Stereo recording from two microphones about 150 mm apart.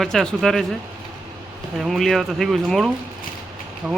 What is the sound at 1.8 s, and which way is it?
Speech, centre (ahead or behind).